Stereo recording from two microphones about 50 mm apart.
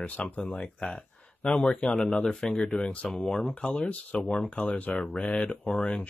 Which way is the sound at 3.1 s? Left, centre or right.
Centre.